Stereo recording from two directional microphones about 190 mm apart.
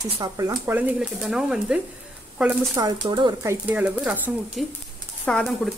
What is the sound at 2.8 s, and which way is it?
Speech, 20° right (ahead or behind).